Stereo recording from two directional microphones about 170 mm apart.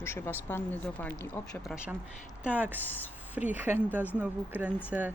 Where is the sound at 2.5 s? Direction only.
10° right (ahead or behind).